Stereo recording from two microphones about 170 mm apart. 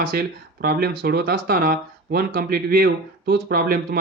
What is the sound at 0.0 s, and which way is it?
A man's voice, 60° right (ahead or behind).